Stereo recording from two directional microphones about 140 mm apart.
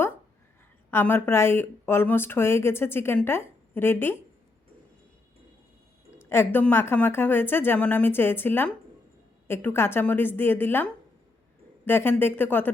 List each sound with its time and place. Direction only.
0.9 s speech: 15° left (ahead or behind)
6.1 s speech: 15° left (ahead or behind)